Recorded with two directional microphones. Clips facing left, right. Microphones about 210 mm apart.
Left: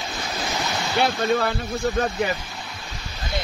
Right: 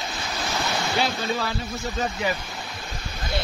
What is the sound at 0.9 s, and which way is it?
Speech, 55° left (ahead or behind).